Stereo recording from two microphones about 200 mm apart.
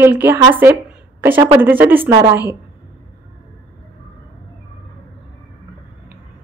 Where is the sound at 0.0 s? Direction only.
10° right (ahead or behind).